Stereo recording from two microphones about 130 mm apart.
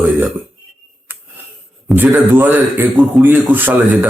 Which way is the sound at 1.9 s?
15° right (ahead or behind).